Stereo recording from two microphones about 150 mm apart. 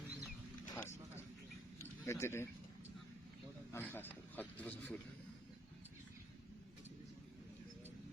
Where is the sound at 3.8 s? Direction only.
15° left (ahead or behind).